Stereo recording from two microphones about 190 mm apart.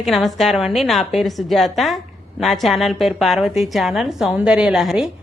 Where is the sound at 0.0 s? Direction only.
Centre (ahead or behind).